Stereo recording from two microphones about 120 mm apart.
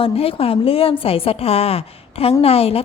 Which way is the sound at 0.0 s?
55° left (ahead or behind).